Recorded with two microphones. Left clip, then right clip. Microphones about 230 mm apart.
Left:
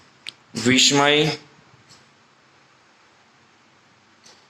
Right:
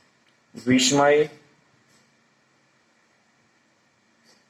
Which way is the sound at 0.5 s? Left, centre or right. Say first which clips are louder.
Left 4 dB; left.